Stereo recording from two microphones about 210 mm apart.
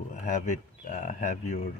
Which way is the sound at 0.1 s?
35° left (ahead or behind).